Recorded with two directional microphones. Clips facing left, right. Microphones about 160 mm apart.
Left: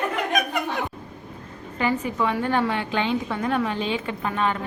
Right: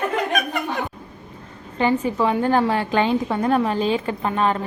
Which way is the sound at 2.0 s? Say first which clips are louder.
Right 4 dB; 30° right (ahead or behind).